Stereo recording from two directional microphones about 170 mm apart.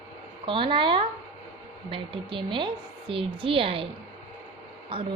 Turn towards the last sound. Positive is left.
turn(degrees=-30)  # may be behind; listen again after turning